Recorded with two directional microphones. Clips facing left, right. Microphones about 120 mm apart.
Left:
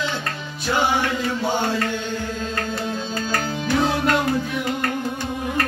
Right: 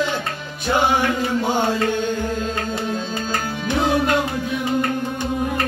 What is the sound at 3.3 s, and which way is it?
Music, 20° right (ahead or behind).